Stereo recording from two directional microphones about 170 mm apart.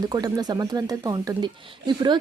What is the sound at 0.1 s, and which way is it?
Speech, 20° right (ahead or behind).